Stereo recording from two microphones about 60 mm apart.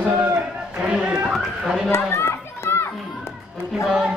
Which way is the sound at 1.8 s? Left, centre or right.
Left.